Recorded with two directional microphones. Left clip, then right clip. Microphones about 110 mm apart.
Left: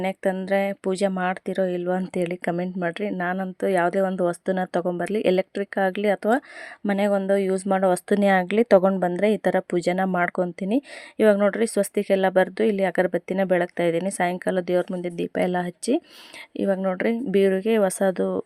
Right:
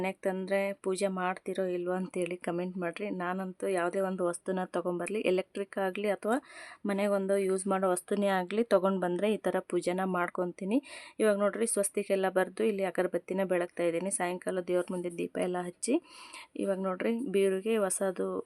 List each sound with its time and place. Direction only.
0.0 s speech: 40° left (ahead or behind)